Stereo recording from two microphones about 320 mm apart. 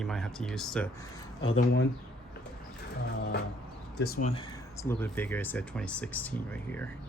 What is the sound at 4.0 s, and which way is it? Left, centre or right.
Speech, left.